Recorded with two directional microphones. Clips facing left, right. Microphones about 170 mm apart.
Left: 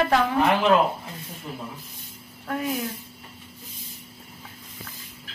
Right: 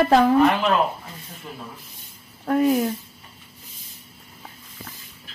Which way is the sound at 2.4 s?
40° right (ahead or behind).